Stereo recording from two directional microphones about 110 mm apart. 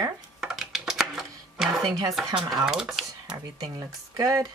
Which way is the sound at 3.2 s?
35° right (ahead or behind).